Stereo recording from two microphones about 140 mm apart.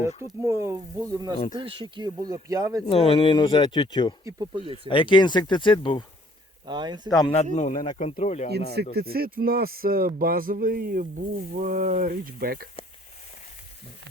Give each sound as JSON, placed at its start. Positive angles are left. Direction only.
{"t": 0.4, "sound": "speech", "side_deg": -20}
{"t": 1.5, "sound": "speech", "side_deg": -35}
{"t": 2.9, "sound": "speech", "side_deg": 40}
{"t": 4.3, "sound": "speech", "side_deg": -35}
{"t": 4.9, "sound": "speech", "side_deg": 35}
{"t": 6.7, "sound": "speech", "side_deg": -30}
{"t": 7.1, "sound": "speech", "side_deg": 30}
{"t": 7.5, "sound": "speech", "side_deg": 60}
{"t": 7.9, "sound": "speech", "side_deg": 50}
{"t": 9.0, "sound": "speech", "side_deg": -90}
{"t": 11.5, "sound": "speech", "side_deg": -70}